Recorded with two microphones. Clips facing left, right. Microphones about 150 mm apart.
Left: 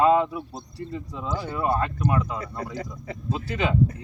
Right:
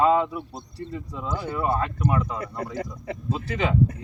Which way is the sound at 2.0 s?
Centre (ahead or behind).